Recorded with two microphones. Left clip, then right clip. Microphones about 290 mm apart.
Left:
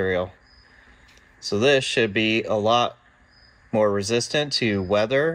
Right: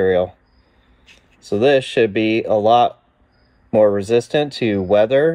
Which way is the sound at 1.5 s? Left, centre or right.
Centre.